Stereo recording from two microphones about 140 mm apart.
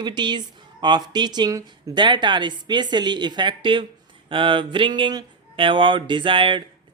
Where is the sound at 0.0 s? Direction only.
30° right (ahead or behind).